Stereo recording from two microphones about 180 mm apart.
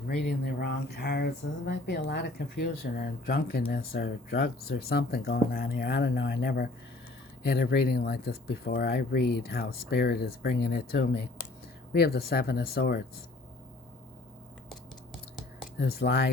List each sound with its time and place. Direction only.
0.3 s speech: 60° left (ahead or behind)
15.8 s speech: 60° left (ahead or behind)